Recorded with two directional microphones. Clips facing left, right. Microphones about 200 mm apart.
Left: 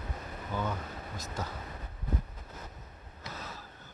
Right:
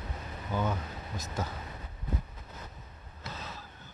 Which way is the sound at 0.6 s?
20° right (ahead or behind).